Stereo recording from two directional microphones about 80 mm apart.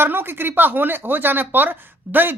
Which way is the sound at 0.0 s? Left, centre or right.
Right.